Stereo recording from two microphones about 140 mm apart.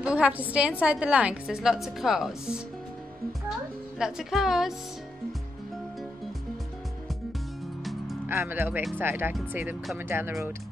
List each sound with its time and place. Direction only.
0.0 s a woman's voice: 10° right (ahead or behind)
4.0 s a woman's voice: centre (ahead or behind)
7.8 s music: centre (ahead or behind)
8.3 s a woman's voice: 15° right (ahead or behind)